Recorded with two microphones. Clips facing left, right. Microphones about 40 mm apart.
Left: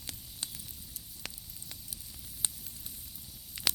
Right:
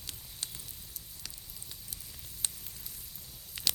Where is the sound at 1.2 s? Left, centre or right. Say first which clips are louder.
Left 5 dB; left.